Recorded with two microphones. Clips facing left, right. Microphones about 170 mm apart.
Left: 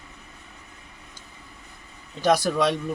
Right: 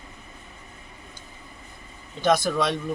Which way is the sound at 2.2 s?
35° left (ahead or behind).